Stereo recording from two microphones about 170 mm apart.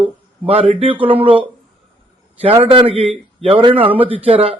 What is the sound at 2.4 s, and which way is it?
A man's voice, 35° right (ahead or behind).